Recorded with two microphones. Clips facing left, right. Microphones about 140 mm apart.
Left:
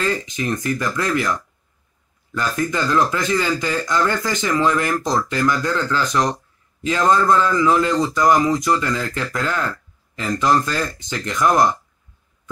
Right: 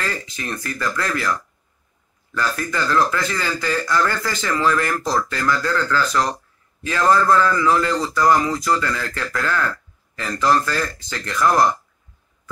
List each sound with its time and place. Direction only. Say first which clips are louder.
0.0 s speech: left 6 dB; 20° left (ahead or behind)